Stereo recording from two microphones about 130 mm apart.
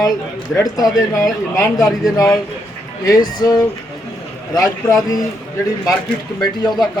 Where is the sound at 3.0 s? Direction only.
30° left (ahead or behind).